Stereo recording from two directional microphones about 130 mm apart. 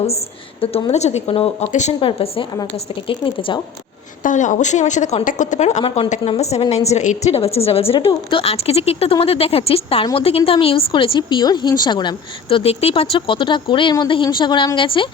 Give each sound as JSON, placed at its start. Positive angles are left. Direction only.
{"t": 0.6, "sound": "a woman's voice", "side_deg": 45}
{"t": 2.0, "sound": "a woman's voice", "side_deg": 45}
{"t": 4.2, "sound": "a woman's voice", "side_deg": 75}